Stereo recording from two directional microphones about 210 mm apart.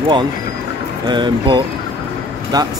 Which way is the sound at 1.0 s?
20° right (ahead or behind).